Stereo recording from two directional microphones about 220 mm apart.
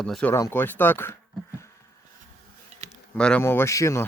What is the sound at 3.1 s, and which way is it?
Speech, 5° left (ahead or behind).